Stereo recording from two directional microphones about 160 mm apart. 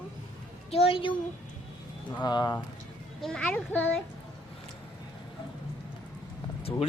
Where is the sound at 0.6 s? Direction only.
40° left (ahead or behind).